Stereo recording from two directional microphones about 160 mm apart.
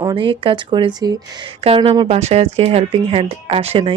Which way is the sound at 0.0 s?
30° right (ahead or behind).